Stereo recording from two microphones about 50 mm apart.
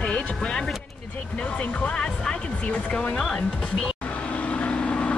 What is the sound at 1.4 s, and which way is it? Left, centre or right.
Speech, left.